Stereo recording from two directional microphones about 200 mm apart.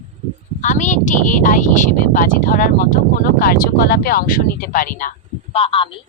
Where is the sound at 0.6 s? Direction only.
40° left (ahead or behind).